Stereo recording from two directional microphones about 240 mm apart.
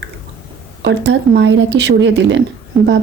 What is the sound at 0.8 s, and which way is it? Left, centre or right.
Speech, right.